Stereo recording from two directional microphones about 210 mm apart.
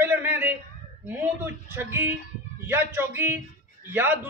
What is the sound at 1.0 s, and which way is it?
A woman's voice, 10° right (ahead or behind).